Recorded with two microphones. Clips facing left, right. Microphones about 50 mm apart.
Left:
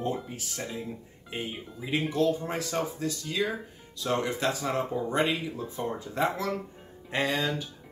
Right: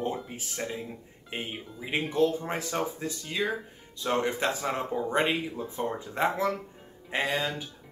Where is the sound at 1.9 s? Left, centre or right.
Right.